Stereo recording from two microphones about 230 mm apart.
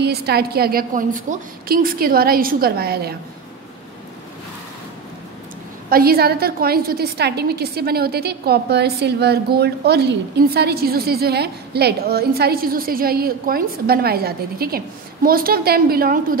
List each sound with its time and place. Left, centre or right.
0.0 s a woman's voice: right
5.9 s a woman's voice: right